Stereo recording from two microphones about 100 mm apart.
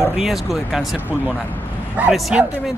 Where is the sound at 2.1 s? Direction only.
Centre (ahead or behind).